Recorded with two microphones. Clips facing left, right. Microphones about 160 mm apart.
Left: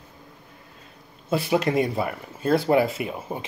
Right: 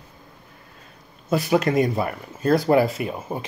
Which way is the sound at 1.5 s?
40° right (ahead or behind).